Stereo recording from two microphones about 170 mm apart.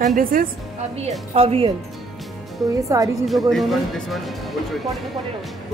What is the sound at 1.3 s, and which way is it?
Speech, 35° right (ahead or behind).